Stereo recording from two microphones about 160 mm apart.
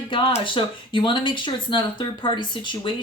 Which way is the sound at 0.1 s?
35° left (ahead or behind).